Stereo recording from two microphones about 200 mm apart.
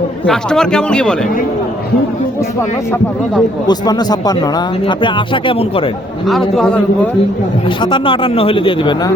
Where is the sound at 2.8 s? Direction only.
10° left (ahead or behind).